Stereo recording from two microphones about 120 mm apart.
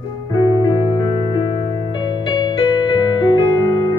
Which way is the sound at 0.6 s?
45° left (ahead or behind).